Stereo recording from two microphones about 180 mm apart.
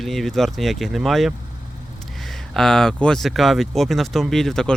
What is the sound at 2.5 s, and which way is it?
Speech, 5° left (ahead or behind).